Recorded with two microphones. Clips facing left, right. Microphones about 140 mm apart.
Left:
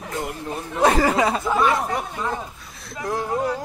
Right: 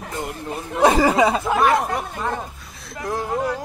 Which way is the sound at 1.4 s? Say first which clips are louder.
Right 2 dB; 50° right (ahead or behind).